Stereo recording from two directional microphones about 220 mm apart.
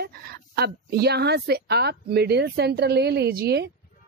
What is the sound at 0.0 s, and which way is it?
Speech, 45° right (ahead or behind).